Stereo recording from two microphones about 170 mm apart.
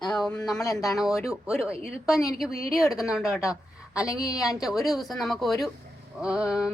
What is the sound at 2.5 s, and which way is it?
Speech, 20° left (ahead or behind).